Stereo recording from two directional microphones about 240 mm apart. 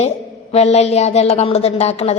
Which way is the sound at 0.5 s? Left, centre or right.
Left.